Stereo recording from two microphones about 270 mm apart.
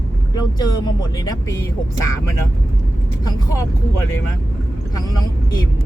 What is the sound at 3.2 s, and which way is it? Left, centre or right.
Speech, centre.